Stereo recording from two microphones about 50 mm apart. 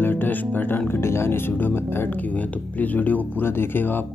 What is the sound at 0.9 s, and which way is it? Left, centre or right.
Speech, left.